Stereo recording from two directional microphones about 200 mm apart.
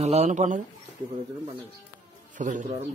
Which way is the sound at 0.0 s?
35° right (ahead or behind).